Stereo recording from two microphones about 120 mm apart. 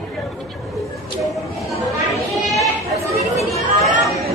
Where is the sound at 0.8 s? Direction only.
Centre (ahead or behind).